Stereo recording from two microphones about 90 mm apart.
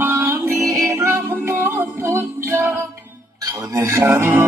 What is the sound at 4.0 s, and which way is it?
Music, 25° right (ahead or behind).